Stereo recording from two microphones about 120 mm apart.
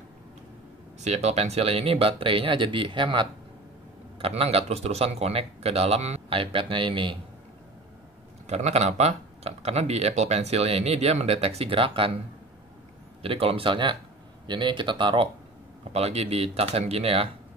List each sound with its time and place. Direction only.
1.0 s speech: 65° right (ahead or behind); by 3.3 s 40° right (ahead or behind)
4.2 s speech: 55° right (ahead or behind)
8.5 s speech: 65° right (ahead or behind); by 12.2 s 50° right (ahead or behind)
13.2 s speech: 50° right (ahead or behind)
15.8 s speech: 60° right (ahead or behind)